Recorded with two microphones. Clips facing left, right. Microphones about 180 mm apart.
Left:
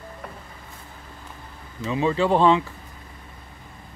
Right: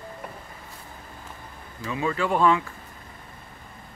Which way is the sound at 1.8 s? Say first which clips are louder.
Left 5 dB; 25° left (ahead or behind).